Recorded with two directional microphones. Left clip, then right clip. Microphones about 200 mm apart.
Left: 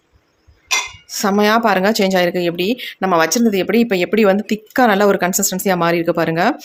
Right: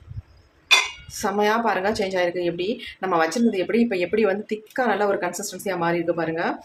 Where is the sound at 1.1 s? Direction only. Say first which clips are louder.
Left 8 dB; 50° left (ahead or behind).